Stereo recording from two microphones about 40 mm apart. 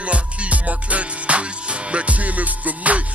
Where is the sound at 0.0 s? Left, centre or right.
Right.